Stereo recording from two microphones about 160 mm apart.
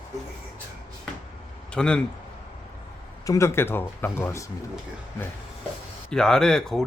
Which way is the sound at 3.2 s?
20° left (ahead or behind).